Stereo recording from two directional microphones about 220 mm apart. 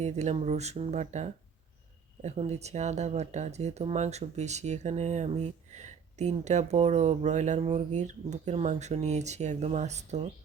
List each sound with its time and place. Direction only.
0.0 s speech: 30° right (ahead or behind)